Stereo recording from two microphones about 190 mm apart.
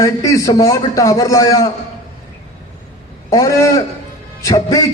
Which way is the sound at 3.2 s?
15° left (ahead or behind).